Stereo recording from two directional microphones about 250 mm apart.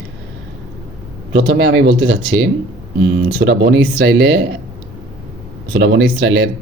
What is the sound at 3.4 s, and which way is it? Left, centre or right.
Speech, right.